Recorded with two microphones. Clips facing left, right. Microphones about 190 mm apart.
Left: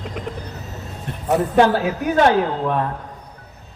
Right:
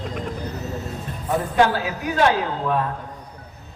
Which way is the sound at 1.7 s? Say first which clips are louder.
Left 5 dB; 50° left (ahead or behind).